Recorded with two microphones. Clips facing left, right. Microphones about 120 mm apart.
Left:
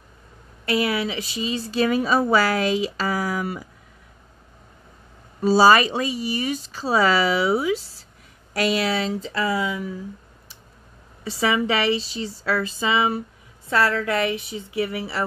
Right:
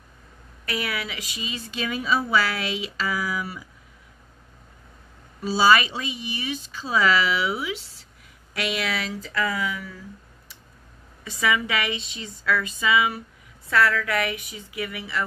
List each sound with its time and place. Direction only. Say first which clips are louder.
0.7 s a woman's voice: left 7 dB; 30° left (ahead or behind); by 3.6 s 45° left (ahead or behind)
5.4 s a woman's voice: left 4 dB; 40° left (ahead or behind); by 10.0 s 25° left (ahead or behind)
11.2 s a woman's voice: left 3 dB; 30° left (ahead or behind)